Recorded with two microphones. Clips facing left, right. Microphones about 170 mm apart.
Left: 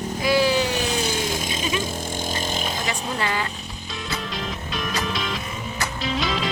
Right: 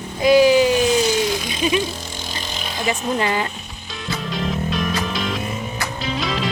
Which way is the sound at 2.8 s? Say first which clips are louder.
Right 5 dB; 20° right (ahead or behind).